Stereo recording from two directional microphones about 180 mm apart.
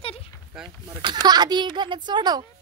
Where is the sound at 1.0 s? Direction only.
25° right (ahead or behind).